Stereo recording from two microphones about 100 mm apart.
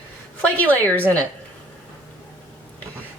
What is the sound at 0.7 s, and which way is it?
Speech, 15° left (ahead or behind).